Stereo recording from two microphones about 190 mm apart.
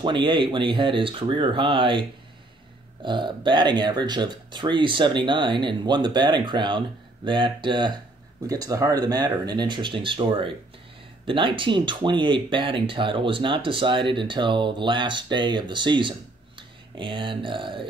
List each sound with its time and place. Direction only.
0.0 s speech: 25° right (ahead or behind)